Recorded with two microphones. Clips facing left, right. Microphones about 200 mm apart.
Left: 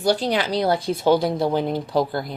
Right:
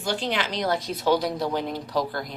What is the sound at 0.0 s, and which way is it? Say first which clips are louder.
Speech: left 6 dB; 40° left (ahead or behind).